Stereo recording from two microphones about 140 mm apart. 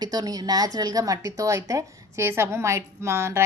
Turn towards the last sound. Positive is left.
turn(degrees=-20)  # may be behind; listen again after turning